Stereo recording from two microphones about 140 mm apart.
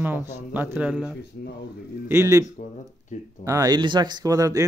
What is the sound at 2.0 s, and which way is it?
Speech, 20° right (ahead or behind).